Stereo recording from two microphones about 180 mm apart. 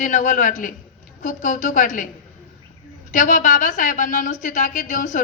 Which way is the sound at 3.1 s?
45° left (ahead or behind).